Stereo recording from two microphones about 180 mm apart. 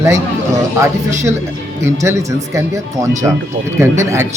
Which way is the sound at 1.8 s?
15° right (ahead or behind).